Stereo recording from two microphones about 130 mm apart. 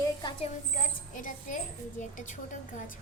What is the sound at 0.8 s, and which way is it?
A woman's voice, 90° left.